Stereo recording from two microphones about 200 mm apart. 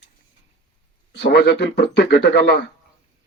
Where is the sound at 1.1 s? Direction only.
55° left (ahead or behind).